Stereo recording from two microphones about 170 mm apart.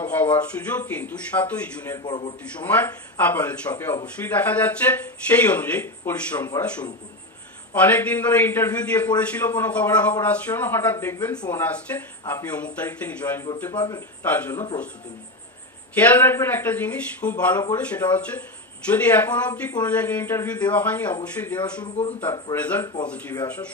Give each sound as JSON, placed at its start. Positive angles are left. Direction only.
{"t": 0.0, "sound": "speech", "side_deg": 10}
{"t": 2.0, "sound": "a man's voice", "side_deg": 25}
{"t": 2.6, "sound": "speech", "side_deg": 10}
{"t": 7.8, "sound": "speech", "side_deg": 10}
{"t": 13.7, "sound": "a man's voice", "side_deg": 20}
{"t": 14.2, "sound": "speech", "side_deg": 10}
{"t": 15.9, "sound": "speech", "side_deg": 10}
{"t": 21.9, "sound": "a man's voice", "side_deg": 40}
{"t": 22.2, "sound": "speech", "side_deg": 15}